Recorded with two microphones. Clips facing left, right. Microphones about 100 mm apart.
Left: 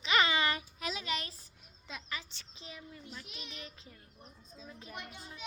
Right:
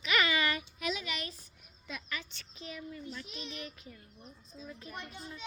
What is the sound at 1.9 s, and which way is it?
A woman's voice, 25° left (ahead or behind).